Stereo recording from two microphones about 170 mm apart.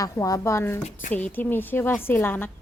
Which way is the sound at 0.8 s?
45° left (ahead or behind).